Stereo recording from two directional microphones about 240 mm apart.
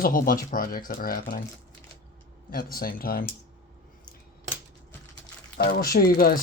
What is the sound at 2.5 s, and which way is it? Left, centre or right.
Speech, left.